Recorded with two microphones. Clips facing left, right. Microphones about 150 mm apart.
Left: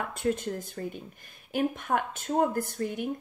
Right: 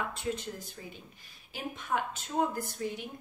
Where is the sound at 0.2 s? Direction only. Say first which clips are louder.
Left 7 dB; 50° left (ahead or behind).